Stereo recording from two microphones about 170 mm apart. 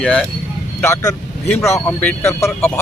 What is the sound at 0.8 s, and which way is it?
Speech, 15° left (ahead or behind).